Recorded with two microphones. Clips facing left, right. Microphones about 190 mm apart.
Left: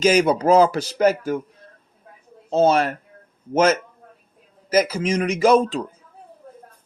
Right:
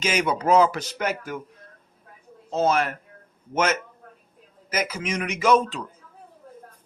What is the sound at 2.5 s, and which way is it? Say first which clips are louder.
A man's voice: left 5 dB; 30° left (ahead or behind).